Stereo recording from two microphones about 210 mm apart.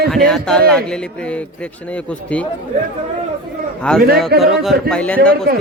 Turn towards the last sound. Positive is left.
turn(degrees=5)  # may be behind; listen again after turning